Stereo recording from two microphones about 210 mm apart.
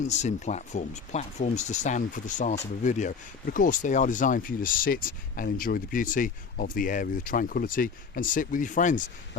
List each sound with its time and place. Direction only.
0.1 s speech: 35° left (ahead or behind)